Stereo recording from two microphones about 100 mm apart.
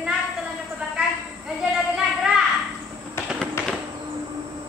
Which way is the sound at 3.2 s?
25° left (ahead or behind).